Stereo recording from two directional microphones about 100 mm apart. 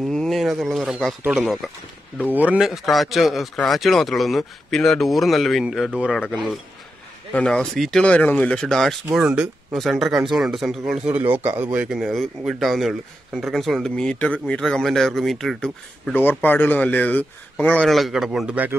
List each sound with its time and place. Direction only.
0.0 s speech: centre (ahead or behind)
2.3 s speech: 15° right (ahead or behind)
2.6 s speech: centre (ahead or behind)
9.2 s speech: 10° right (ahead or behind)
9.8 s speech: centre (ahead or behind)
10.9 s speech: 15° right (ahead or behind); by 15.7 s 5° left (ahead or behind)
16.1 s speech: 20° left (ahead or behind)
17.8 s speech: centre (ahead or behind)